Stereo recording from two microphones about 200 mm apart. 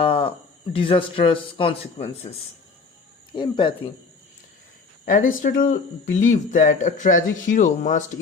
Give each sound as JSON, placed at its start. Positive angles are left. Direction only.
{"t": 0.0, "sound": "a sound", "side_deg": 30}
{"t": 0.7, "sound": "speech", "side_deg": 25}
{"t": 3.3, "sound": "speech", "side_deg": 25}
{"t": 5.0, "sound": "speech", "side_deg": 40}